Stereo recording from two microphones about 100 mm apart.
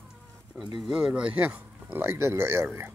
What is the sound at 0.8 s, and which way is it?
Speech, 5° right (ahead or behind).